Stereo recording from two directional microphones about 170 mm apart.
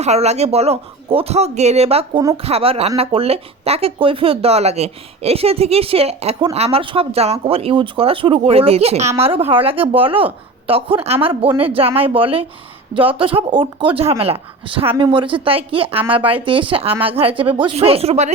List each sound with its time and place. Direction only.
0.0 s speech: 40° right (ahead or behind)